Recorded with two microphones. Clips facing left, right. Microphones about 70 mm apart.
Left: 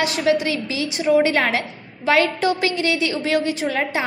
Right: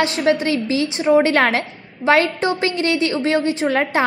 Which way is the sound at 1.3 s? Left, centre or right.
Right.